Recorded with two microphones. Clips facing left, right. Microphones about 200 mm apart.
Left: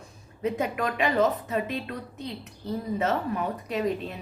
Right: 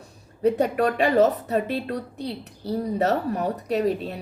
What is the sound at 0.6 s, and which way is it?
A woman's voice, 35° right (ahead or behind).